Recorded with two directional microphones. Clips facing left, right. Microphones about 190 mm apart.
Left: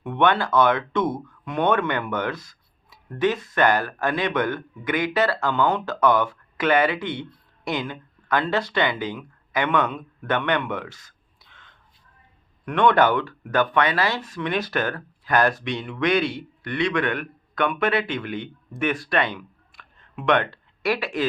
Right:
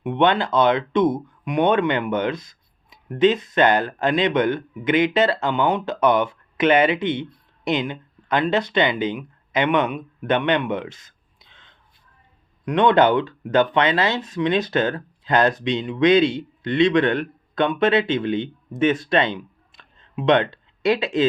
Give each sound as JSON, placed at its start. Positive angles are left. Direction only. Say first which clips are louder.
{"t": 0.0, "sound": "speech", "louder": "right 2 dB", "side_deg": -20}